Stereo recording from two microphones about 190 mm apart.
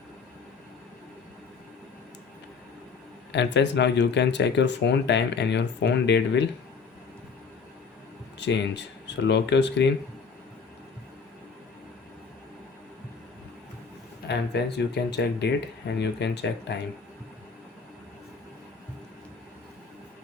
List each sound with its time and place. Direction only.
3.3 s speech: 65° left (ahead or behind)
8.4 s speech: 70° left (ahead or behind)
14.3 s speech: 65° left (ahead or behind)